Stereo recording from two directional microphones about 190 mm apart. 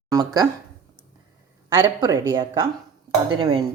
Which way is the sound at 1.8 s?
15° right (ahead or behind).